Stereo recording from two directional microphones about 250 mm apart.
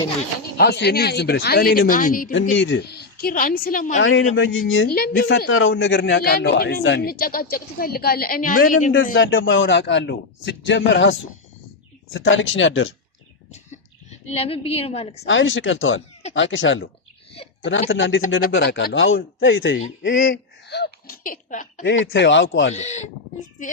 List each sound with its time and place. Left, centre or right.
0.5 s a woman's voice: left
2.6 s a woman's voice: left
4.0 s a man's voice: left
9.0 s a man's voice: left
12.1 s a man's voice: left
13.5 s a sound: left
15.2 s a man's voice: left
21.8 s a man's voice: left
22.7 s speech: left